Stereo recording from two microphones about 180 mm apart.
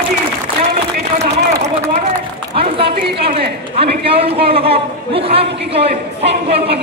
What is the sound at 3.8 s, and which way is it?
A man's voice, 30° right (ahead or behind).